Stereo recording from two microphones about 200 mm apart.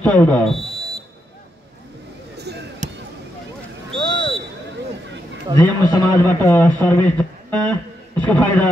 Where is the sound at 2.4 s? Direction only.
55° right (ahead or behind).